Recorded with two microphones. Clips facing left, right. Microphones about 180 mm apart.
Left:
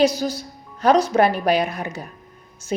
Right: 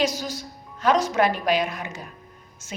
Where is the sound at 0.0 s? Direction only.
35° left (ahead or behind).